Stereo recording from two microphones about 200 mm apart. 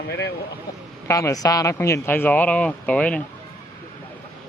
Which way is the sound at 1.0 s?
15° left (ahead or behind).